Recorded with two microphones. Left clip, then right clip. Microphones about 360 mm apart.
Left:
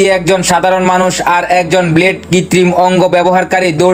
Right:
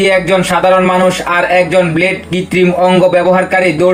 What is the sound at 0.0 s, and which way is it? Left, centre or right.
Speech, left.